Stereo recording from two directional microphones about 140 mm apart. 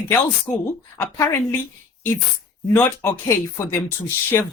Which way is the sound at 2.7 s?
15° left (ahead or behind).